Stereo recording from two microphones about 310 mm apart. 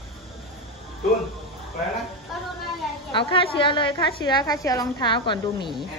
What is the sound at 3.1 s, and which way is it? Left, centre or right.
A woman's voice, centre.